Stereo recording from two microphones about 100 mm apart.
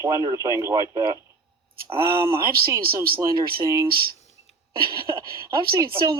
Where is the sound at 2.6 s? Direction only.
25° right (ahead or behind).